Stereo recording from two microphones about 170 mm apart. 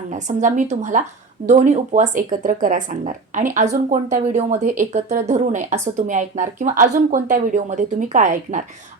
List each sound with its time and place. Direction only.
0.1 s speech: 45° right (ahead or behind)